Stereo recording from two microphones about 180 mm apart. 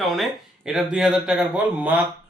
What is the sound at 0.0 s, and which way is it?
Speech, centre (ahead or behind).